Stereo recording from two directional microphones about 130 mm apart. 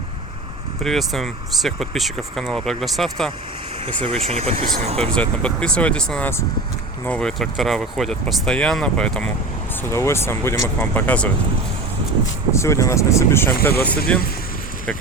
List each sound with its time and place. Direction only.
0.8 s speech: centre (ahead or behind)
4.2 s speech: 50° right (ahead or behind)
4.9 s speech: 10° left (ahead or behind)
9.9 s speech: 20° left (ahead or behind)
12.5 s speech: 20° left (ahead or behind)